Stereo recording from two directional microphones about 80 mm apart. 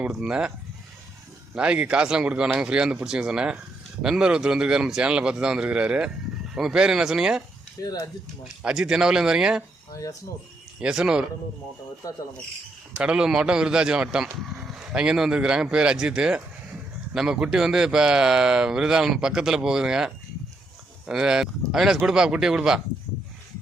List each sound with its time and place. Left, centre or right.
0.0 s a man's voice: centre
1.5 s a man's voice: centre
8.6 s a man's voice: centre
9.9 s speech: left
10.8 s a man's voice: centre
13.0 s a man's voice: centre